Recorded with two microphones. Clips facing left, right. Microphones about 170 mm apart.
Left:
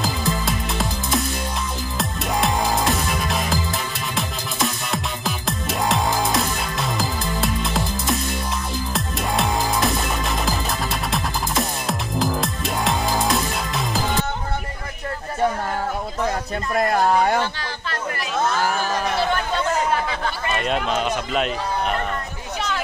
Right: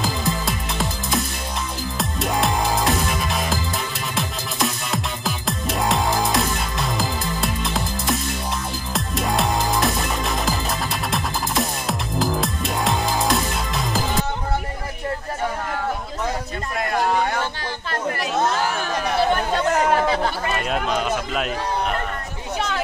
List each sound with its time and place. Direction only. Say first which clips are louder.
0.0 s music: even; centre (ahead or behind)
16.7 s a sound: left 3 dB; 35° left (ahead or behind)
20.5 s run: left 1 dB; 5° right (ahead or behind)